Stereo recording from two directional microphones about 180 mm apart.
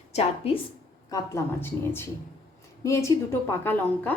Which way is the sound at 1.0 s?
20° left (ahead or behind).